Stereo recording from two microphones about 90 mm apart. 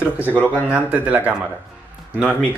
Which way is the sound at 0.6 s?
15° right (ahead or behind).